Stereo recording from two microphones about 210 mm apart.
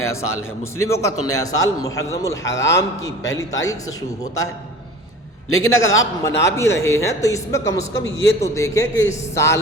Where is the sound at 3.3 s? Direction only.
15° left (ahead or behind).